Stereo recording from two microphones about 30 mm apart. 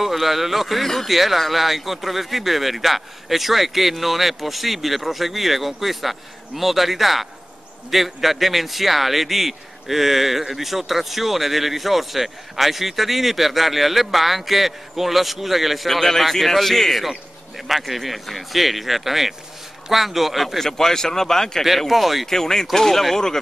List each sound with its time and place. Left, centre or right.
0.0 s speech: centre
0.8 s speech: centre
1.1 s speech: centre
17.6 s speech: centre
20.6 s speech: centre
21.6 s speech: centre
22.3 s speech: centre